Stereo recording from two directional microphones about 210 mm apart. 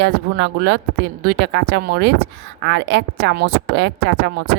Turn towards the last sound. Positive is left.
turn(degrees=-55)  # may be behind; listen again after turning